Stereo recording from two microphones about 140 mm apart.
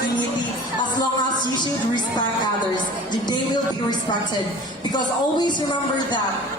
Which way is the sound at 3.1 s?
30° left (ahead or behind).